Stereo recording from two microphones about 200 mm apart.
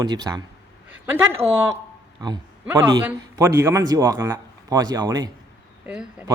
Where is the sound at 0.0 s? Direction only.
20° right (ahead or behind).